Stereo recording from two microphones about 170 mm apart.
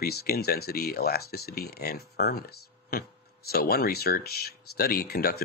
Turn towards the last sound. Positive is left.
turn(degrees=65)  # may be behind; listen again after turning